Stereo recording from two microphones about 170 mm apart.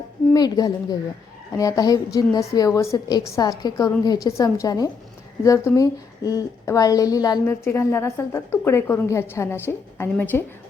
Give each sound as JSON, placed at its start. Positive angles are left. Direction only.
{"t": 0.3, "sound": "a woman's voice", "side_deg": 25}